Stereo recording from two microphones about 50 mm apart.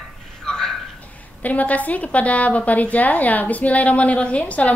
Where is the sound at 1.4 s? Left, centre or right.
Left.